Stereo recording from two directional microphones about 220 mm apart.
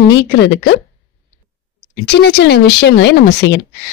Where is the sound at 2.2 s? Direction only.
50° left (ahead or behind).